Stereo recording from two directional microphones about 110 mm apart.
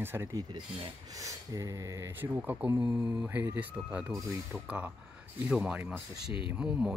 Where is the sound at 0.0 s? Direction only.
20° right (ahead or behind).